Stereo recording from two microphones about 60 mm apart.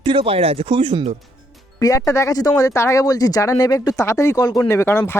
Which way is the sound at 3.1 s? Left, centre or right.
Left.